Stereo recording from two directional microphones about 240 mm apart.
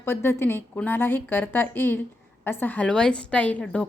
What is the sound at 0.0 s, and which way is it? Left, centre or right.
A woman's voice, centre.